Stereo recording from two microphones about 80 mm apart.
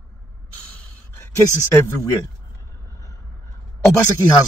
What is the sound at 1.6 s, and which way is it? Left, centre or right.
Speech, left.